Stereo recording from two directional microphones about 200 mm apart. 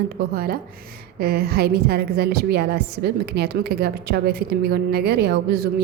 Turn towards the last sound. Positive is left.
turn(degrees=-55)  # may be behind; listen again after turning